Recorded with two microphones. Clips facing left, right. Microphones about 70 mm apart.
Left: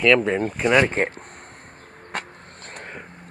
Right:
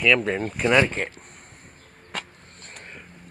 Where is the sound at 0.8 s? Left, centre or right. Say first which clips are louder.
Left 6 dB; left.